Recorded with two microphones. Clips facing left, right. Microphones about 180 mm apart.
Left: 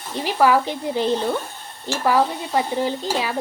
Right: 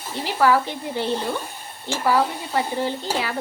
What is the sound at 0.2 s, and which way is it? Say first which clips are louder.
Speech: left 2 dB; 15° left (ahead or behind).